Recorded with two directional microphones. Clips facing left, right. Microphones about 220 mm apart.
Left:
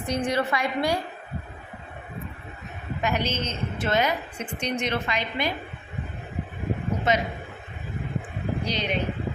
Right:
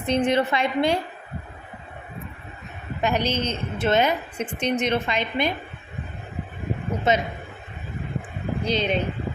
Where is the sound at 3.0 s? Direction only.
35° right (ahead or behind).